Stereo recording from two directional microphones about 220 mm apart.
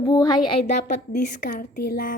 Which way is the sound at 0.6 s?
35° left (ahead or behind).